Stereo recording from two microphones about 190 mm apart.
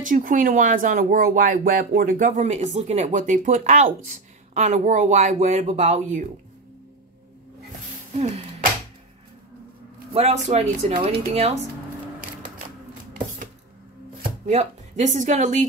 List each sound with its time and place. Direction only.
0.0 s speech: 45° right (ahead or behind)
8.1 s speech: 35° right (ahead or behind)
10.1 s speech: 35° right (ahead or behind)
14.5 s speech: 40° right (ahead or behind)